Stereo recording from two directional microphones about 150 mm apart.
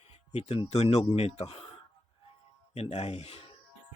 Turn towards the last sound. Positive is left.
turn(degrees=45)  # may be behind; listen again after turning